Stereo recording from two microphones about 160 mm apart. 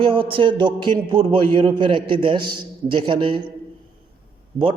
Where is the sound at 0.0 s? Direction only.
35° right (ahead or behind).